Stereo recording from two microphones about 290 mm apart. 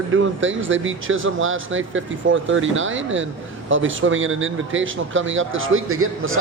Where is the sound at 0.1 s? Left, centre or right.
Right.